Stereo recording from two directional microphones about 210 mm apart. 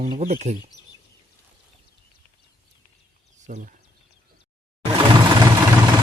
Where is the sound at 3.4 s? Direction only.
35° right (ahead or behind).